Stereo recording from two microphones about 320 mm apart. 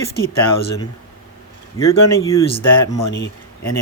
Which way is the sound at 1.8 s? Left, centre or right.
Centre.